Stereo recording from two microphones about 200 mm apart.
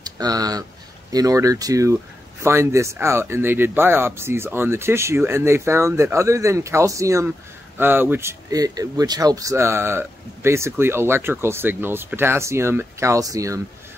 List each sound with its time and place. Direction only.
0.0 s speech: 20° right (ahead or behind)